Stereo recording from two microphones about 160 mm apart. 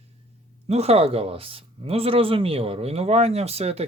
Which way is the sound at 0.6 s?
40° right (ahead or behind).